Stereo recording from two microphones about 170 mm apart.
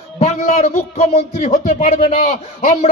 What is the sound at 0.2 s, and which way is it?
A man's voice, 40° left (ahead or behind).